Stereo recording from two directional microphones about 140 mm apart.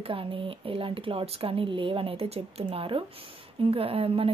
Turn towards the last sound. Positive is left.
turn(degrees=-45)  # may be behind; listen again after turning